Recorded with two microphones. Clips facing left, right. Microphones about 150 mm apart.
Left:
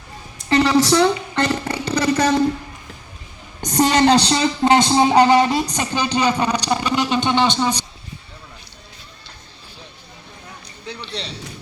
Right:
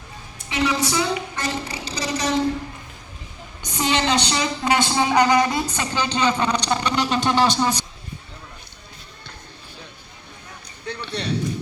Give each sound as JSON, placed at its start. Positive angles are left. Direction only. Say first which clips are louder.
{"t": 0.4, "sound": "a woman's voice", "louder": "left 7 dB", "side_deg": 70}
{"t": 3.6, "sound": "a woman's voice", "louder": "left 7 dB", "side_deg": 40}
{"t": 4.7, "sound": "a man's voice", "louder": "left 5 dB", "side_deg": 25}
{"t": 10.8, "sound": "speech", "louder": "right 4 dB", "side_deg": -55}